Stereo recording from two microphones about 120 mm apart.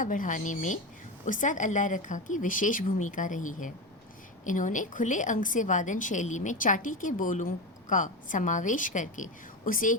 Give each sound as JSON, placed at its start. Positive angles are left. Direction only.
{"t": 0.0, "sound": "a woman's voice", "side_deg": 90}